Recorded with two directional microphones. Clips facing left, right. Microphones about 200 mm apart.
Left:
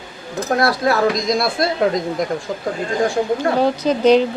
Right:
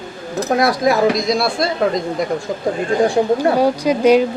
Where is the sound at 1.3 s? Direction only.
Centre (ahead or behind).